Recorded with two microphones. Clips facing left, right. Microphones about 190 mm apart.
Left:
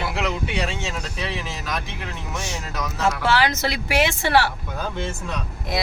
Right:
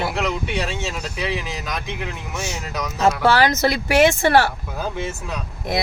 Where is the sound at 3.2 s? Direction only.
40° right (ahead or behind).